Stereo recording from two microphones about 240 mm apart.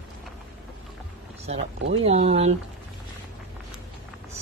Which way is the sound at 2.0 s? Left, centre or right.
Right.